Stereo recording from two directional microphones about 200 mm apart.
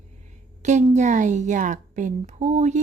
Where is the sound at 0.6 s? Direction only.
35° right (ahead or behind).